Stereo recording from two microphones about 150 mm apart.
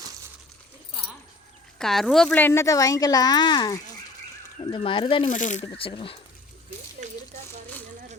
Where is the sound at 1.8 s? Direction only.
5° left (ahead or behind); by 5.3 s 35° left (ahead or behind).